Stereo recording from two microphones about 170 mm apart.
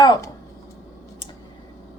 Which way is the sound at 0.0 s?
25° left (ahead or behind).